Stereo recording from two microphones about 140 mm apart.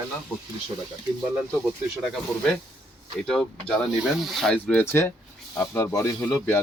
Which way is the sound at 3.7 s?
Centre (ahead or behind).